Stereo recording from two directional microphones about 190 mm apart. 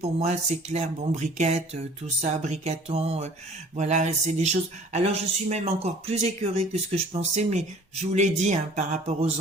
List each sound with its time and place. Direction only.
0.0 s speech: 35° right (ahead or behind)